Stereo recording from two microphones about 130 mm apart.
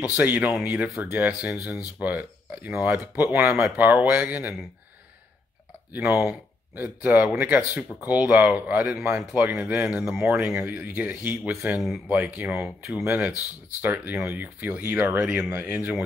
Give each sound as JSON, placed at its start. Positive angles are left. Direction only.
{"t": 0.1, "sound": "speech", "side_deg": -10}
{"t": 5.9, "sound": "speech", "side_deg": -15}